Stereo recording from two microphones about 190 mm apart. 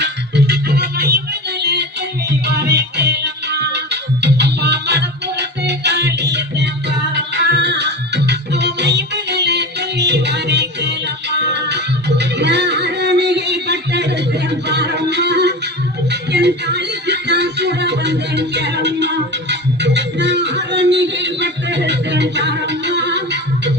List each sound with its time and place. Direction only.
0.0 s music: 60° right (ahead or behind)
14.7 s a sound: 65° right (ahead or behind)
16.3 s music: 65° right (ahead or behind)